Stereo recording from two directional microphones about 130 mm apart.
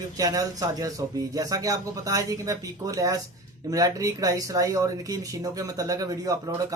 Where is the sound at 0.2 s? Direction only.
30° right (ahead or behind).